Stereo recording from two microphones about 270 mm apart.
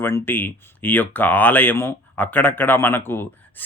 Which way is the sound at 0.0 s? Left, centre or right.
Centre.